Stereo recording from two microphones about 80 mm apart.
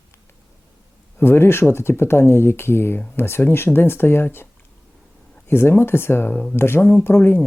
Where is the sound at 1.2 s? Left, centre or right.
Left.